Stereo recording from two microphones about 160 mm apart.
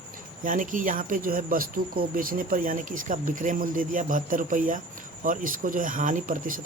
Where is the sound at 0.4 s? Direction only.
55° right (ahead or behind).